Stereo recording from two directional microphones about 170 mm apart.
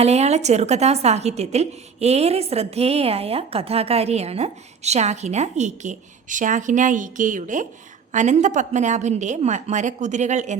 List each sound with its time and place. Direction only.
0.0 s a woman's voice: 40° right (ahead or behind)